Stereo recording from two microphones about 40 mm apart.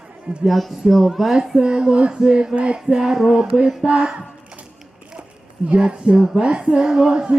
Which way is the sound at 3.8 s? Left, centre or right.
Right.